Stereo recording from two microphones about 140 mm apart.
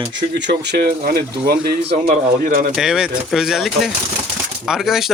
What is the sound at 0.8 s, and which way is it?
Speech, 90° right.